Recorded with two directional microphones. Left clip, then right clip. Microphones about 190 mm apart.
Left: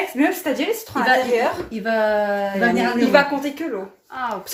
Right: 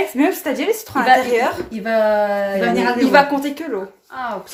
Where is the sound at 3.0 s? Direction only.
40° right (ahead or behind).